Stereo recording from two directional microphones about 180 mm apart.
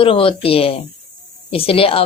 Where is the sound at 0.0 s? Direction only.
30° left (ahead or behind).